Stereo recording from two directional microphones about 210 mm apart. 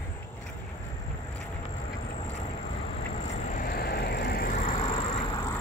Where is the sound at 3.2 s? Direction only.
35° left (ahead or behind).